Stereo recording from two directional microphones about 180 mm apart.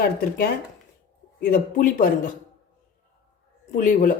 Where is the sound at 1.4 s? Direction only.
50° left (ahead or behind).